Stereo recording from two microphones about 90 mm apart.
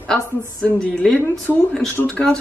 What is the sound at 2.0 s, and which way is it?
Speech, 10° left (ahead or behind).